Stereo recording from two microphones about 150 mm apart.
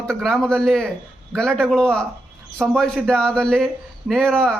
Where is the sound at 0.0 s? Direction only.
5° left (ahead or behind).